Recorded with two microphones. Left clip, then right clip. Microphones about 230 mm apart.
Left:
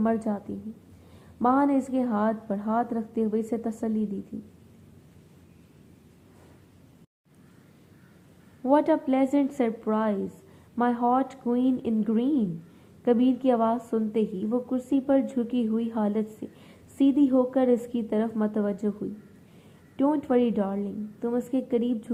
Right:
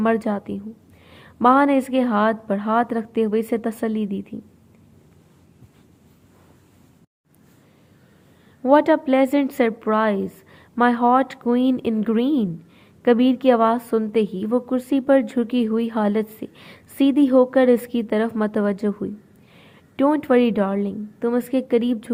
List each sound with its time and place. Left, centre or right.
0.0 s a woman's voice: right
8.6 s a woman's voice: right